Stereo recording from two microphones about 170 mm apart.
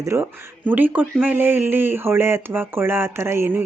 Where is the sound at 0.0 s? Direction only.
15° right (ahead or behind).